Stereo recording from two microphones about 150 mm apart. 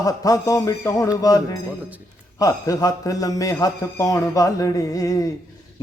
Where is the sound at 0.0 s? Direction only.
25° left (ahead or behind).